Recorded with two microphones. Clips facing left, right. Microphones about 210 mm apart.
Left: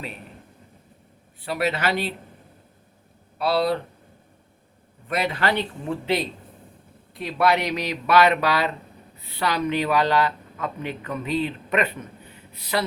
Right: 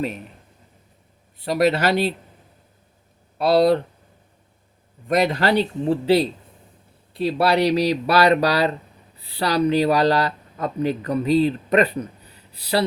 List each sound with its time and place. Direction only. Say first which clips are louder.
1.5 s speech: right 6 dB; 40° right (ahead or behind)
3.3 s speech: right 6 dB; 40° right (ahead or behind)
5.0 s speech: right 5 dB; 40° right (ahead or behind)